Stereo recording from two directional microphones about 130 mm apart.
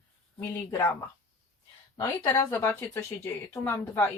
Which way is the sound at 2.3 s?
20° left (ahead or behind).